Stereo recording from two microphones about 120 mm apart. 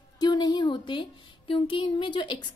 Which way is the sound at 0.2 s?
35° left (ahead or behind).